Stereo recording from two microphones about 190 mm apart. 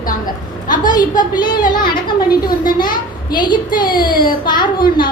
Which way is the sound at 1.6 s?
45° left (ahead or behind).